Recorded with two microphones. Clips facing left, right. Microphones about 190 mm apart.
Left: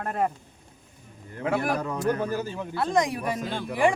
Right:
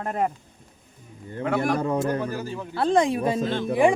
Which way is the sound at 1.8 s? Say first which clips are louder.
Right 2 dB; 25° right (ahead or behind).